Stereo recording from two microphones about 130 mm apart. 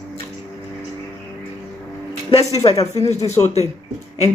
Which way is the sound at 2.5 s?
55° left (ahead or behind).